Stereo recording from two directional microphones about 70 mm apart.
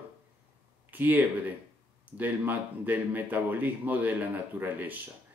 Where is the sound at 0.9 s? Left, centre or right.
Right.